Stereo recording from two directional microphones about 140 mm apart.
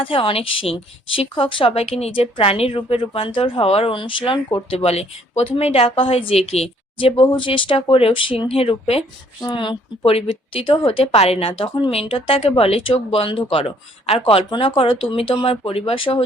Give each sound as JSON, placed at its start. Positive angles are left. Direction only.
{"t": 0.0, "sound": "a woman's voice", "side_deg": 40}